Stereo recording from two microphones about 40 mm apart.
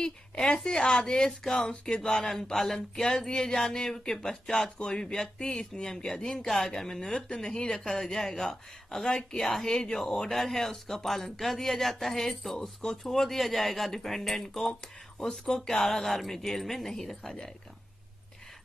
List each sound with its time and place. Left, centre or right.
0.0 s a woman's voice: centre
4.6 s speech: left; by 14.7 s centre
15.2 s speech: centre